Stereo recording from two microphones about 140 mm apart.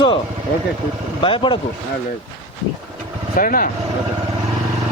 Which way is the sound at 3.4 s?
90° left.